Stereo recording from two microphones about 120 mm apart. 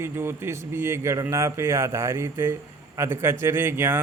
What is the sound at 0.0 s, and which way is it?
Speech, 20° right (ahead or behind).